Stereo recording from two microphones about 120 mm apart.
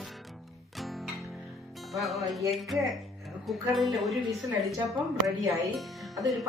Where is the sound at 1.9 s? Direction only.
Centre (ahead or behind).